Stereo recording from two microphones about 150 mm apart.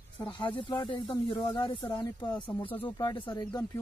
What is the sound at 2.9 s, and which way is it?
Speech, 30° left (ahead or behind).